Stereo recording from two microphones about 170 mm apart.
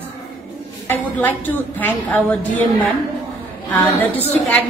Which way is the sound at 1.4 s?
10° left (ahead or behind).